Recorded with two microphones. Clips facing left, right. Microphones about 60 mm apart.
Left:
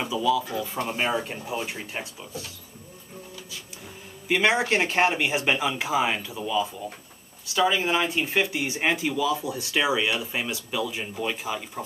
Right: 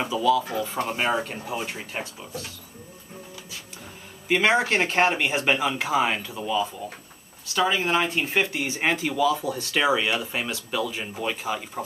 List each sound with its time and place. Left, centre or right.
0.1 s a sound: right
0.8 s speech: centre
2.0 s speech: centre
4.3 s speech: centre
11.1 s speech: centre